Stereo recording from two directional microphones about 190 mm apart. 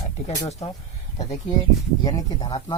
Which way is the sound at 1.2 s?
20° left (ahead or behind).